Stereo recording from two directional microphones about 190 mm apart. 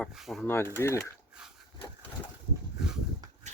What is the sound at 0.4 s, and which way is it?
Speech, 10° left (ahead or behind).